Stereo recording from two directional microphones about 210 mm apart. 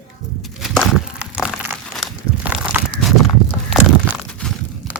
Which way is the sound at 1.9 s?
Centre (ahead or behind).